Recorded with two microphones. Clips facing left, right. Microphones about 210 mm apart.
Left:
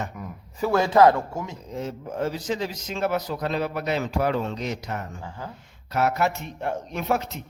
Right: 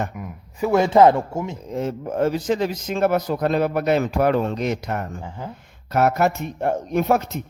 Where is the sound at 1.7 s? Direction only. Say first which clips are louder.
Right 6 dB; 55° right (ahead or behind).